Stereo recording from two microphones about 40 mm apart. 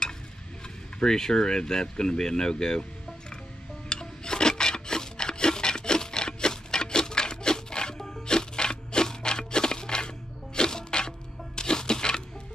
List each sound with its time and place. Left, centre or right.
0.9 s speech: centre
3.9 s rub: centre
8.0 s music: centre